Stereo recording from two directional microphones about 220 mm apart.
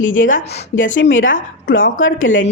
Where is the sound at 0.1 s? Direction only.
35° left (ahead or behind).